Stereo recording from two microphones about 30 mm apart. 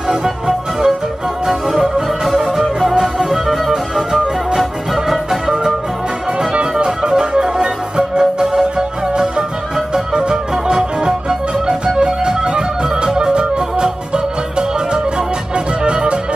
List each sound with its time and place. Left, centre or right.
0.5 s music: centre
2.9 s music: centre
6.7 s music: right